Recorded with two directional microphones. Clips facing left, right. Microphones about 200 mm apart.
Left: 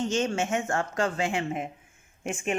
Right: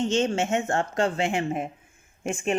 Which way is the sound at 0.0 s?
25° right (ahead or behind).